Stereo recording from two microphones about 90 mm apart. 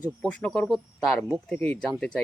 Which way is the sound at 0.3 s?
10° left (ahead or behind).